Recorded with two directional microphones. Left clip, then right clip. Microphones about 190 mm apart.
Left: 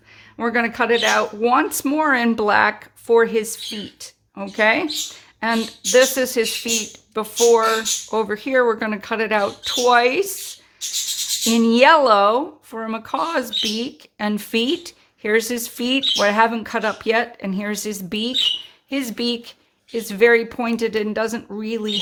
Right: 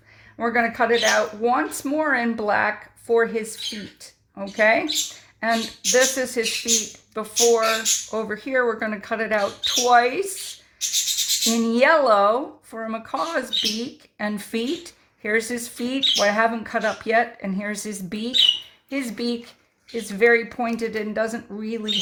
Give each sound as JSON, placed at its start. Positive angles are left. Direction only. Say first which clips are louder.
{"t": 0.3, "sound": "speech", "louder": "left 1 dB", "side_deg": 35}
{"t": 11.4, "sound": "speech", "louder": "left 6 dB", "side_deg": 30}